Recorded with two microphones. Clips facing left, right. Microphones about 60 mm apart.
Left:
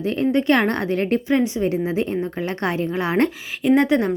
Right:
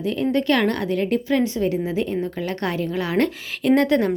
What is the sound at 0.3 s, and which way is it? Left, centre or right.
Speech, left.